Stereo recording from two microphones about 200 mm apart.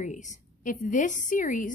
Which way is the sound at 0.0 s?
35° left (ahead or behind).